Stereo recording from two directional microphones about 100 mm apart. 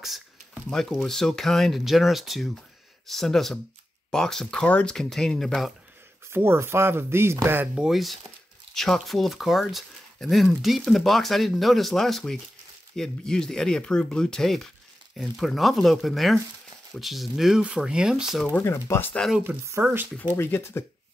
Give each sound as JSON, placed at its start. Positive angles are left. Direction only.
{"t": 0.7, "sound": "speech", "side_deg": 5}
{"t": 6.3, "sound": "speech", "side_deg": -25}
{"t": 7.6, "sound": "speech", "side_deg": -10}
{"t": 18.6, "sound": "speech", "side_deg": 25}
{"t": 19.4, "sound": "speech", "side_deg": -25}
{"t": 20.3, "sound": "speech", "side_deg": 25}